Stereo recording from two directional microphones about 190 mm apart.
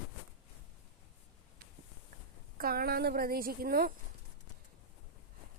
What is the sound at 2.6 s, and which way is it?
A woman's voice, 50° right (ahead or behind).